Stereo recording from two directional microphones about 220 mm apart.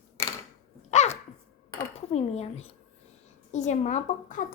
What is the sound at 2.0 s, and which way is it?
Speech, 30° left (ahead or behind).